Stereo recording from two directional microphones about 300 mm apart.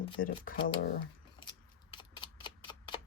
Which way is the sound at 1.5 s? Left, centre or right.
Centre.